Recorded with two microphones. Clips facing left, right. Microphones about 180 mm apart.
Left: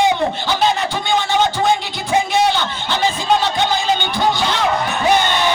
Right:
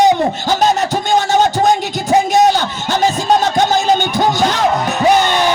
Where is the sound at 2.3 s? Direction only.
40° right (ahead or behind).